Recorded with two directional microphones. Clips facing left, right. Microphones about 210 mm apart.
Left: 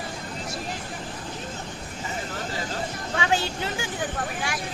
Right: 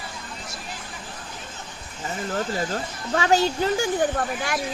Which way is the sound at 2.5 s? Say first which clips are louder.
Right 3 dB; 45° right (ahead or behind).